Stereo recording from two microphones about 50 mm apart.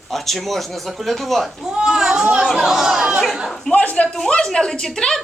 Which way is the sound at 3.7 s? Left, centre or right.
Left.